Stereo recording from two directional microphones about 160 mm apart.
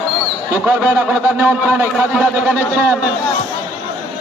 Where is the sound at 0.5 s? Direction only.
10° right (ahead or behind).